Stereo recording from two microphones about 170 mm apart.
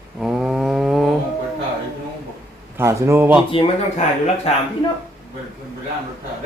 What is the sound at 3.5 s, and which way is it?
Speech, 35° left (ahead or behind).